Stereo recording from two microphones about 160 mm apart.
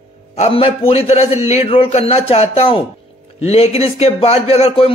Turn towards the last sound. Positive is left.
turn(degrees=40)  # may be behind; listen again after turning